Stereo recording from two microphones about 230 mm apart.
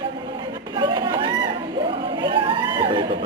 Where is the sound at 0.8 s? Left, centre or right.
Centre.